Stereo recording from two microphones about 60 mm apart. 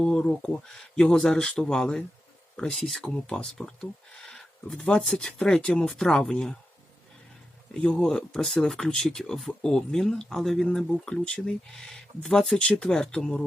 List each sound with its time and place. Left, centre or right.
0.0 s speech: centre
3.0 s speech: centre
7.7 s speech: centre
12.5 s speech: centre